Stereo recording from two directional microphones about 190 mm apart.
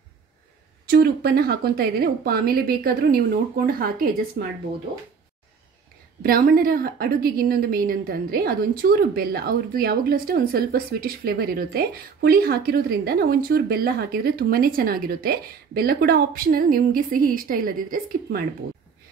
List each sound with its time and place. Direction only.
0.8 s a woman's voice: 55° right (ahead or behind)
6.2 s a woman's voice: 50° right (ahead or behind)